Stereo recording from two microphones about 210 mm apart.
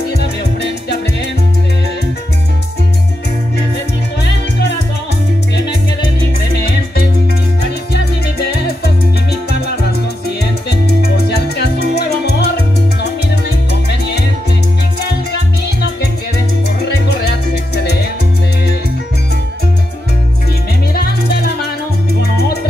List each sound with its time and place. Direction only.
4.2 s music: 55° left (ahead or behind)
8.8 s music: 50° left (ahead or behind)
13.8 s music: 50° left (ahead or behind)
16.8 s music: 50° left (ahead or behind)
20.9 s music: 45° left (ahead or behind)